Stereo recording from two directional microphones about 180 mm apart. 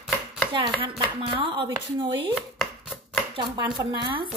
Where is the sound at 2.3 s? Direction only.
Centre (ahead or behind).